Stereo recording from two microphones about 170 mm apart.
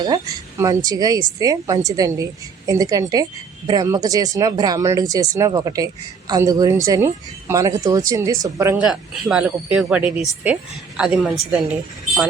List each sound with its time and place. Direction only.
0.0 s speech: 20° right (ahead or behind)
8.9 s speech: 5° right (ahead or behind)